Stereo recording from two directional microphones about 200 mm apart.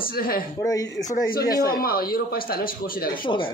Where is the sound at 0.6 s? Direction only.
15° left (ahead or behind).